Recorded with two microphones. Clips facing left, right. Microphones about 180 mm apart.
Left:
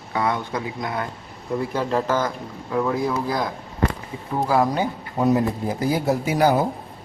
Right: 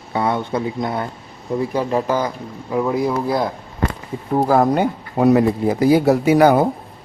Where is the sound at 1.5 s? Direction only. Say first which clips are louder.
Right 3 dB; 15° right (ahead or behind).